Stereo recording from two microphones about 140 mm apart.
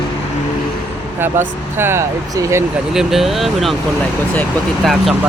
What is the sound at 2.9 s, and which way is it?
Speech, centre (ahead or behind).